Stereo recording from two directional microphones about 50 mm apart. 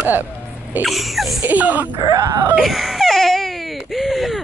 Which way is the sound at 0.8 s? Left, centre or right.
Centre.